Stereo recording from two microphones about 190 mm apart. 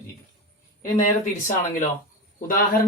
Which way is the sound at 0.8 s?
40° left (ahead or behind).